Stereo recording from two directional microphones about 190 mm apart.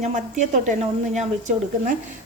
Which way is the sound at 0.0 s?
40° right (ahead or behind).